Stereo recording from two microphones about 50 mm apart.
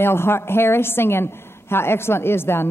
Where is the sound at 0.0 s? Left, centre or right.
Left.